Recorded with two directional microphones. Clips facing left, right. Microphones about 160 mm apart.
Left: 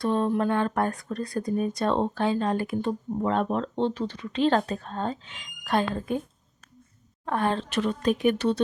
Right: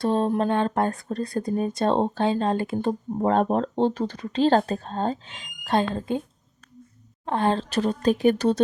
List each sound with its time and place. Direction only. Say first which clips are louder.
0.0 s speech: right 2 dB; 30° right (ahead or behind)
2.8 s speech: right 3 dB; 40° right (ahead or behind)
7.3 s speech: right 3 dB; 30° right (ahead or behind)